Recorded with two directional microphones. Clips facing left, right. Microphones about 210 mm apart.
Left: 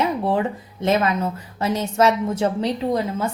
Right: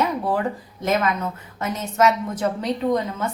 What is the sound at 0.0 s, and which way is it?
A woman's voice, 25° left (ahead or behind).